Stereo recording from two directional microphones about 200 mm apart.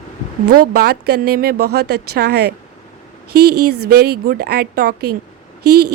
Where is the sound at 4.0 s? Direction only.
50° right (ahead or behind).